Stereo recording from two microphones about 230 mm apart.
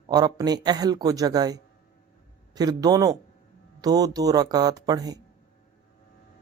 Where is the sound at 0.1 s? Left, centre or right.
Centre.